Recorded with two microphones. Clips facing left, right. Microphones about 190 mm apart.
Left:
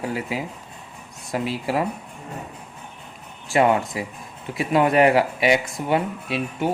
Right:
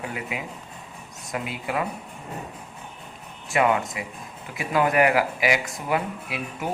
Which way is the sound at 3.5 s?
30° left (ahead or behind).